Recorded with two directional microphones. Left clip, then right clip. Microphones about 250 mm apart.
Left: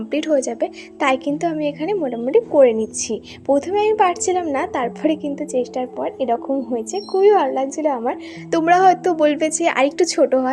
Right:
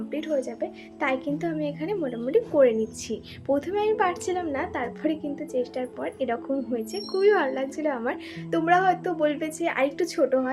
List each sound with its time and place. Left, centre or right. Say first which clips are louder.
0.1 s a woman's voice: left 10 dB; left; by 8.1 s centre
8.4 s a woman's voice: left 8 dB; left